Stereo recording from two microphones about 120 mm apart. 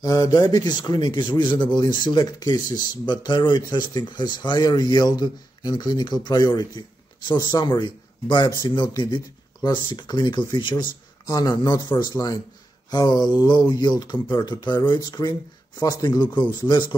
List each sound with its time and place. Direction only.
0.0 s speech: 30° left (ahead or behind)